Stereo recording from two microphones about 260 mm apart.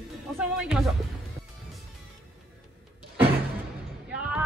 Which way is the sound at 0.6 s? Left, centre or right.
Centre.